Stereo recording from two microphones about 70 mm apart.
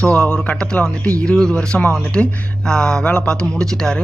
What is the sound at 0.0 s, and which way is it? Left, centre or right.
Speech, centre.